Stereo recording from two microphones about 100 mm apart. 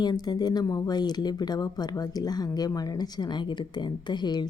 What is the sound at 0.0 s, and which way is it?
A woman's voice, 45° left (ahead or behind).